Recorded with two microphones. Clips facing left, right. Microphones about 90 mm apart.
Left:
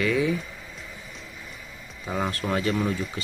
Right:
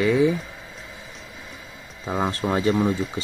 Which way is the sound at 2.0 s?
20° right (ahead or behind).